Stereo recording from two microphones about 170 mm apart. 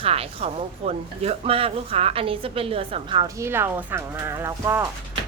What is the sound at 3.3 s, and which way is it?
Speech, 15° right (ahead or behind).